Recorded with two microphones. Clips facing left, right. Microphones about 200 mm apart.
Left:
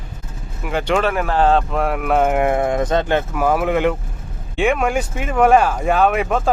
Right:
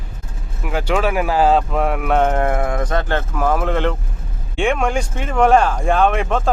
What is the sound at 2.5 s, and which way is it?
Speech, 20° left (ahead or behind).